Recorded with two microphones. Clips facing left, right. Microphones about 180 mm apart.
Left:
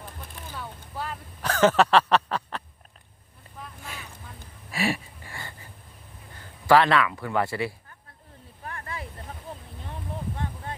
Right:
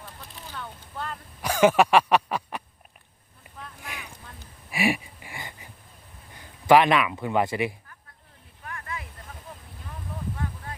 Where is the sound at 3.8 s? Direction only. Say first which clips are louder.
Even; 15° right (ahead or behind).